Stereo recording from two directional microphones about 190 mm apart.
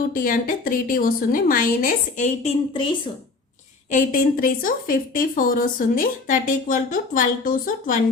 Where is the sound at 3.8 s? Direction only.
45° left (ahead or behind).